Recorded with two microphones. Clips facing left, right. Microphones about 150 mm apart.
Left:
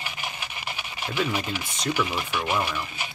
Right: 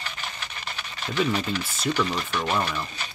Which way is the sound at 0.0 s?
10° left (ahead or behind).